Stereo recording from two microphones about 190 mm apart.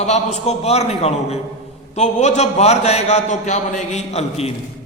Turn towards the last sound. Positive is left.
turn(degrees=35)  # may be behind; listen again after turning